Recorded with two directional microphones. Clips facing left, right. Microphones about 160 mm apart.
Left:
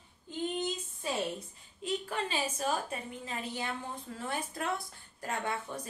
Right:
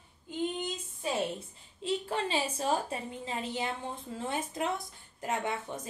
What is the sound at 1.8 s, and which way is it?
A woman's voice, 30° right (ahead or behind).